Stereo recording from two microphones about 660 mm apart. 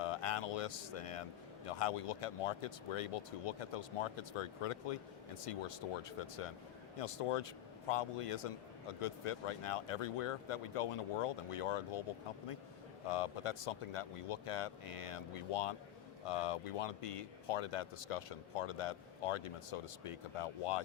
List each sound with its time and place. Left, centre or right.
0.0 s a sound: left
1.6 s speech: left
13.1 s speech: left